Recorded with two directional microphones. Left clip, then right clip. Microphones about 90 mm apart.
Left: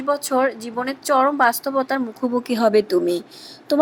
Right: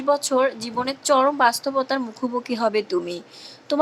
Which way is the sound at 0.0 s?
20° left (ahead or behind).